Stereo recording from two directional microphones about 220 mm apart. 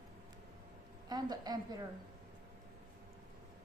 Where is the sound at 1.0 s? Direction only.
20° right (ahead or behind).